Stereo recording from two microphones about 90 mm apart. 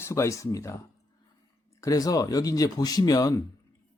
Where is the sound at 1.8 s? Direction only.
40° left (ahead or behind).